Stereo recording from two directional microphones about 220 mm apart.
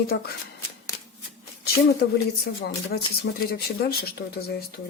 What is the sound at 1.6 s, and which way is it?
Speech, 45° left (ahead or behind).